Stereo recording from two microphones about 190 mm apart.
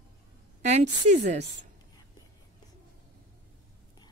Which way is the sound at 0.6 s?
40° right (ahead or behind).